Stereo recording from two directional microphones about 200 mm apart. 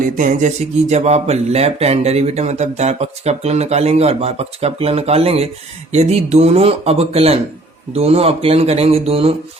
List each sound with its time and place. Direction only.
0.0 s speech: 40° right (ahead or behind)